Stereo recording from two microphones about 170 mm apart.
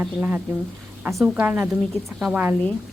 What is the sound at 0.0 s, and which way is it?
A woman's voice, 10° right (ahead or behind).